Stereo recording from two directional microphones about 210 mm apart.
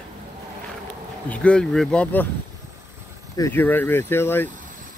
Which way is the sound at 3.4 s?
10° left (ahead or behind).